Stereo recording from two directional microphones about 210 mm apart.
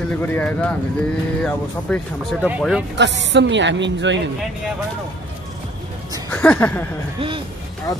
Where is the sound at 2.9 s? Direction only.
55° right (ahead or behind).